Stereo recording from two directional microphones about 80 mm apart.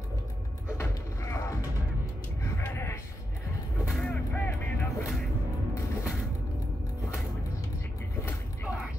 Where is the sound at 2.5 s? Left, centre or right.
Left.